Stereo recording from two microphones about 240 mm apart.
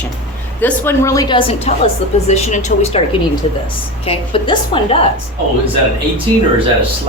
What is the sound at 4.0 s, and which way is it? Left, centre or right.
Speech, left.